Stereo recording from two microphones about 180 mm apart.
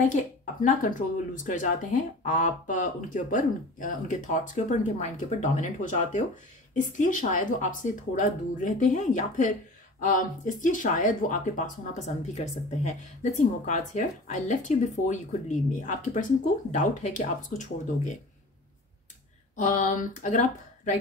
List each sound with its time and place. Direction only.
0.0 s speech: 45° left (ahead or behind)
19.5 s speech: 45° left (ahead or behind)